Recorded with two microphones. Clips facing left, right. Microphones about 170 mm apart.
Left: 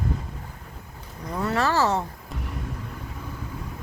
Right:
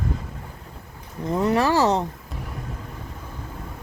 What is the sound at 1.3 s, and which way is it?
Speech, 20° right (ahead or behind).